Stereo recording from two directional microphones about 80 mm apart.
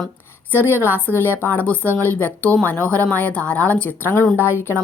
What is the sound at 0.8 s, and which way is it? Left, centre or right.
A woman's voice, left.